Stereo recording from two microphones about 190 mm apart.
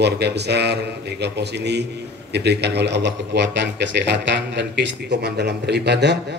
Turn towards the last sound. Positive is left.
turn(degrees=-65)  # may be behind; listen again after turning